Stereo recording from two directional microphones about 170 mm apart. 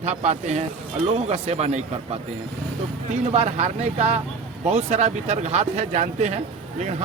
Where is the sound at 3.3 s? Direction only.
40° right (ahead or behind).